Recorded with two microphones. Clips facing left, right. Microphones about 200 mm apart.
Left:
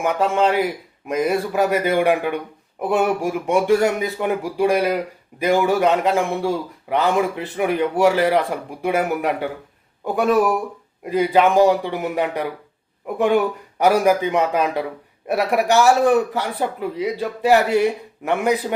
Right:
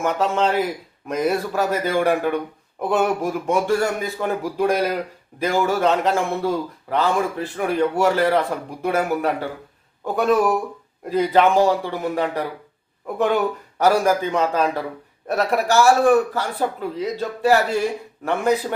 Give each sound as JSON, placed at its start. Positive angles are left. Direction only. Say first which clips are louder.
{"t": 0.0, "sound": "a man's voice", "louder": "left 2 dB", "side_deg": 10}
{"t": 6.9, "sound": "a man's voice", "louder": "left 2 dB", "side_deg": 15}